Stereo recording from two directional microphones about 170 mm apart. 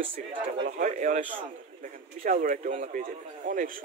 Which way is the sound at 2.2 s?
50° right (ahead or behind).